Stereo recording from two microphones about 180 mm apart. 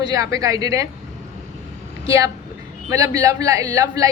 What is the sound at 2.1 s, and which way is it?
A woman's voice, 15° right (ahead or behind).